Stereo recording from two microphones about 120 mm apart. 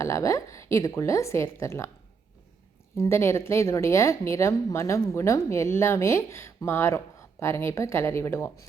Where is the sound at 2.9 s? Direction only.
20° left (ahead or behind).